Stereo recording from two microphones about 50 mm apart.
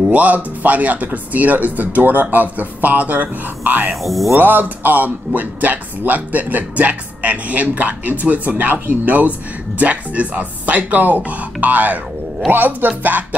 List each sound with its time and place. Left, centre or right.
0.1 s speech: right
3.9 s speech: centre
4.4 s speech: right